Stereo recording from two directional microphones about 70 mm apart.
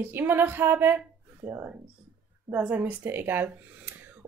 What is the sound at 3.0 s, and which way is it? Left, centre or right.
Speech, right.